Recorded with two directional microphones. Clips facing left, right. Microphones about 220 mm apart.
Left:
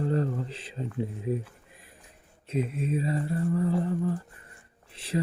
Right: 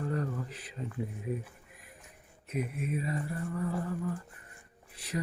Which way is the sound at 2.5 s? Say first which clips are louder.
Left 5 dB; 25° left (ahead or behind).